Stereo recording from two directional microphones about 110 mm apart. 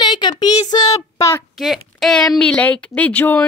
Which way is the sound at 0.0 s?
45° left (ahead or behind).